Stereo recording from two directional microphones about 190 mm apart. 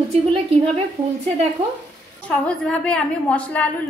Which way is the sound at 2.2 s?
5° left (ahead or behind).